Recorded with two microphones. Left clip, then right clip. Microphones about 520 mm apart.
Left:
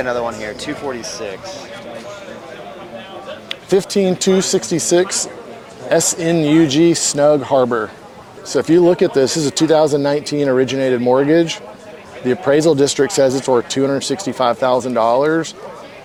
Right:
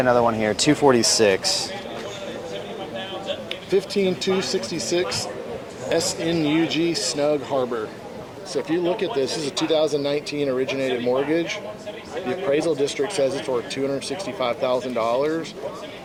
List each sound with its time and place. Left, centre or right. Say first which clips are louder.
0.0 s speech: right 2 dB; centre; by 1.5 s right
3.5 s speech: left 7 dB; left
8.7 s speech: left 11 dB; left